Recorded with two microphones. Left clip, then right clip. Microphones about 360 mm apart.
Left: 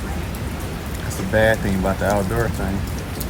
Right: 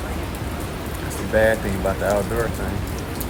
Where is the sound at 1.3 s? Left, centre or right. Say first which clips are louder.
Left 1 dB; centre.